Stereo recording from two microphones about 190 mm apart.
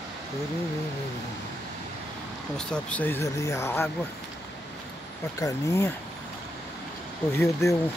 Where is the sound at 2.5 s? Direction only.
5° left (ahead or behind).